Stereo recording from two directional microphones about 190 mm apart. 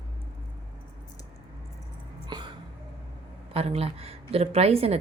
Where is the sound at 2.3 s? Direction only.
20° right (ahead or behind).